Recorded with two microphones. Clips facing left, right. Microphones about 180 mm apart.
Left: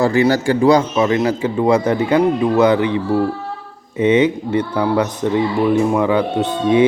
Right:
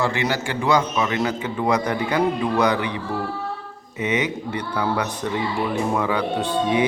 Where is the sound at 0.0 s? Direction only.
40° left (ahead or behind).